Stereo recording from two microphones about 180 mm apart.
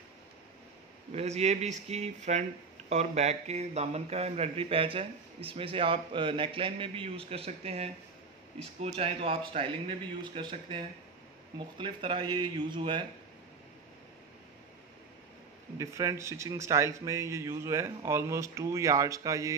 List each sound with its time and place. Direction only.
1.1 s speech: 35° right (ahead or behind)
15.8 s a man's voice: 15° right (ahead or behind)